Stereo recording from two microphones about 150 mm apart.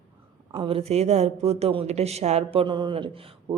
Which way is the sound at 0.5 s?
35° right (ahead or behind).